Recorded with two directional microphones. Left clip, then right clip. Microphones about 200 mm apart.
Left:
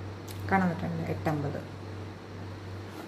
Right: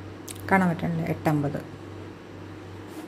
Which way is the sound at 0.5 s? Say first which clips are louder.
Right 5 dB; 40° right (ahead or behind).